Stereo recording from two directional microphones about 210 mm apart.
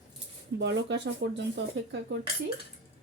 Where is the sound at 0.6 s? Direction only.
60° right (ahead or behind).